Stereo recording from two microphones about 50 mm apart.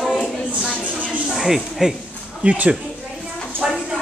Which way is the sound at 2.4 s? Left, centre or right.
Right.